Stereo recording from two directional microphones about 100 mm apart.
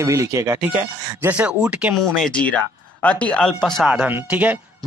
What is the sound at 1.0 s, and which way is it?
Speech, 20° right (ahead or behind).